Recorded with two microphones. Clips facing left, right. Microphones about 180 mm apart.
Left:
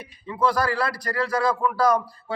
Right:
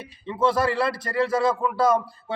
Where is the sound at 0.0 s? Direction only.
25° right (ahead or behind).